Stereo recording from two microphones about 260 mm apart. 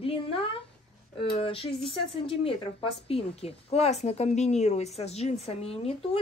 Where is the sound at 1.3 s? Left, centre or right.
Left.